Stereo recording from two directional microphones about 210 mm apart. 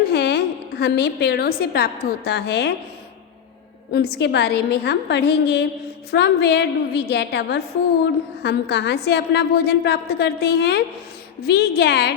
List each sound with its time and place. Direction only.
0.1 s a woman's voice: 50° left (ahead or behind)
3.9 s a woman's voice: 50° left (ahead or behind)